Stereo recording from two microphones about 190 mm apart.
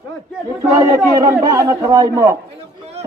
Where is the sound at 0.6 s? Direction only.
15° right (ahead or behind).